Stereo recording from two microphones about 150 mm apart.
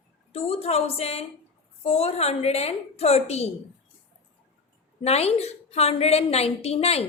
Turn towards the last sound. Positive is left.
turn(degrees=40)  # may be behind; listen again after turning